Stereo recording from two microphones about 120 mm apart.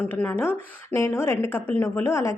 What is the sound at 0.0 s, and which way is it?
A woman's voice, 15° left (ahead or behind).